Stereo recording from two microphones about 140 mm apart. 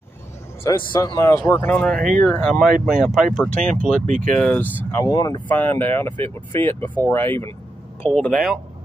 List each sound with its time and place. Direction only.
0.7 s a man's voice: 25° left (ahead or behind)
1.4 s speech: 10° left (ahead or behind)
4.0 s speech: 65° right (ahead or behind)
4.4 s speech: 10° left (ahead or behind)
4.9 s a man's voice: 25° left (ahead or behind)
5.5 s speech: 15° left (ahead or behind)